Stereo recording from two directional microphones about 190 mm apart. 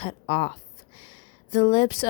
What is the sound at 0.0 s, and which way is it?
Speech, 30° left (ahead or behind).